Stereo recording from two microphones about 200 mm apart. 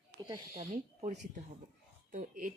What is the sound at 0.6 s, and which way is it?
Speech, 35° right (ahead or behind).